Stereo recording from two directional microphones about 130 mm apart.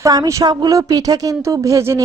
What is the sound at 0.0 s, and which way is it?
A woman's voice, 25° right (ahead or behind).